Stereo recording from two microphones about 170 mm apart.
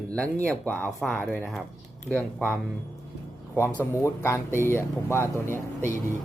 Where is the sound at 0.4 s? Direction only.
10° left (ahead or behind).